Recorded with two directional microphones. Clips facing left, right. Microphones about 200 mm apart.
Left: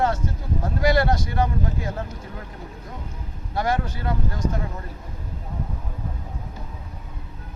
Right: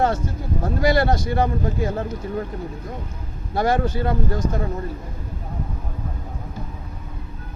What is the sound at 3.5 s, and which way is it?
Speech, 30° right (ahead or behind).